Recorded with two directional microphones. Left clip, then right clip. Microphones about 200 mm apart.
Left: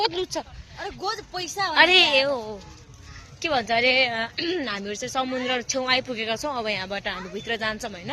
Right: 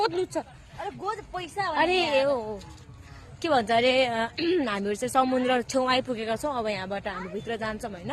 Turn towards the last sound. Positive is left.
turn(degrees=0)  # may be behind; listen again after turning